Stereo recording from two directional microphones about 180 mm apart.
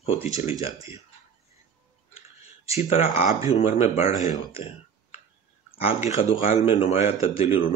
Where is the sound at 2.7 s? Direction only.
30° left (ahead or behind).